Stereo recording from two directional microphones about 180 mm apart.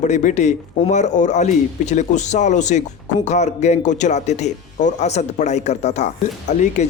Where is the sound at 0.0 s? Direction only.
45° left (ahead or behind).